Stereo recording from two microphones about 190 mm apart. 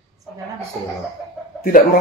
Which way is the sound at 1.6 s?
45° left (ahead or behind).